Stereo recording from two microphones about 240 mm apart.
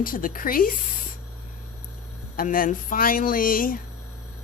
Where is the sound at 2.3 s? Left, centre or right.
Left.